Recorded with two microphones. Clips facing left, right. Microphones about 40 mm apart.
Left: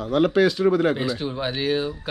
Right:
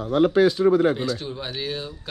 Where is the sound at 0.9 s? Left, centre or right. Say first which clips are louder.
Left 1 dB; centre.